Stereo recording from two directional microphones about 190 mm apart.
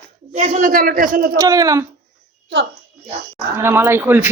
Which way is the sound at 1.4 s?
20° right (ahead or behind).